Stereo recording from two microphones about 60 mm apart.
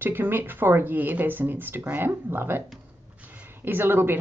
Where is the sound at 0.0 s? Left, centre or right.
Right.